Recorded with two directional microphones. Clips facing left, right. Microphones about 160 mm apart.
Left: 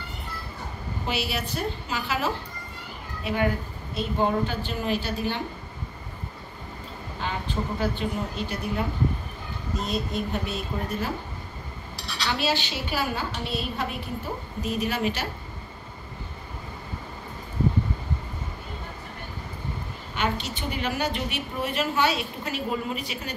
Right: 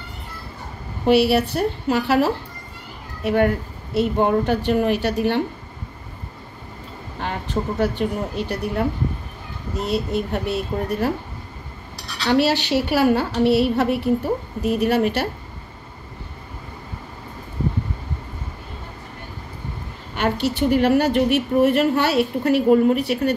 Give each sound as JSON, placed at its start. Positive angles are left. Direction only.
{"t": 1.0, "sound": "a woman's voice", "side_deg": -60}
{"t": 7.2, "sound": "a woman's voice", "side_deg": -65}
{"t": 12.3, "sound": "a woman's voice", "side_deg": -70}
{"t": 20.2, "sound": "a woman's voice", "side_deg": -65}